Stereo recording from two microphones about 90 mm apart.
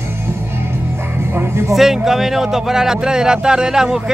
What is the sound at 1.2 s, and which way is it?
Music, 30° right (ahead or behind).